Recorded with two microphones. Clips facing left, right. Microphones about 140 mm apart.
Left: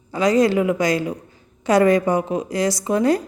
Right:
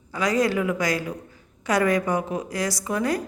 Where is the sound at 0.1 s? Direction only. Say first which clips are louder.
Left 6 dB; 25° left (ahead or behind).